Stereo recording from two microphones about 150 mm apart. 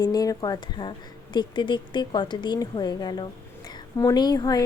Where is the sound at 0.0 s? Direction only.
25° left (ahead or behind).